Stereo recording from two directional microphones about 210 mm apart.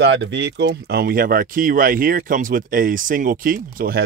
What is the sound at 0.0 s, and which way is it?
Speech, 55° right (ahead or behind).